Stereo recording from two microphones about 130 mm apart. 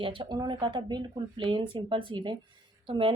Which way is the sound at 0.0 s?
40° right (ahead or behind).